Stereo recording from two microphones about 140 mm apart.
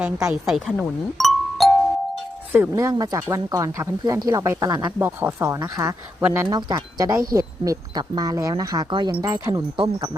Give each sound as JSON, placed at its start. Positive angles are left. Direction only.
{"t": 0.0, "sound": "speech", "side_deg": -20}
{"t": 0.4, "sound": "a woman's voice", "side_deg": 0}
{"t": 1.2, "sound": "music", "side_deg": 0}
{"t": 2.5, "sound": "speech", "side_deg": -15}
{"t": 4.9, "sound": "speech", "side_deg": -15}
{"t": 6.5, "sound": "speech", "side_deg": -30}